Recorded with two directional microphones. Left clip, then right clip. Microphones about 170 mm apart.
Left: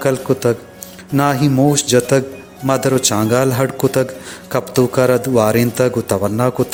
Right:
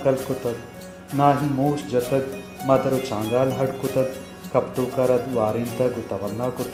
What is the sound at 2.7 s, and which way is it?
Speech, 90° left.